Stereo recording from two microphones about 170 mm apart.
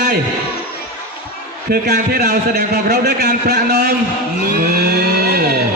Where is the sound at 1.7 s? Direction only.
65° right (ahead or behind).